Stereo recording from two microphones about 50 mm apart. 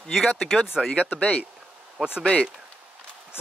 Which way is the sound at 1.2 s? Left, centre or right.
Left.